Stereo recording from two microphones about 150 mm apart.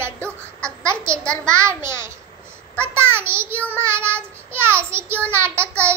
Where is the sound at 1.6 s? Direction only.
20° right (ahead or behind).